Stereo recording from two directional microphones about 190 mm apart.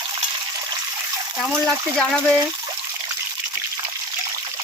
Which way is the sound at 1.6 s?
5° left (ahead or behind).